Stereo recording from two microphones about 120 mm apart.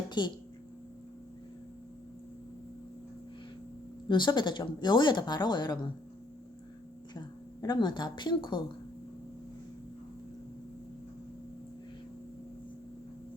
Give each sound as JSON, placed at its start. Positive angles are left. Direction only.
{"t": 0.2, "sound": "speech", "side_deg": 40}
{"t": 4.1, "sound": "speech", "side_deg": 40}
{"t": 7.1, "sound": "speech", "side_deg": 35}